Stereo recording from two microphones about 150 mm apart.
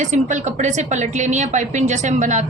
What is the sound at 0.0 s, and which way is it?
A woman's voice, 55° right (ahead or behind).